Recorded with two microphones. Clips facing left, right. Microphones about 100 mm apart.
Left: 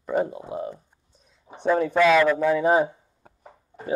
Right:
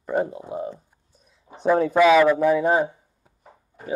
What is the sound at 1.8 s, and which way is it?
Speech, 10° right (ahead or behind).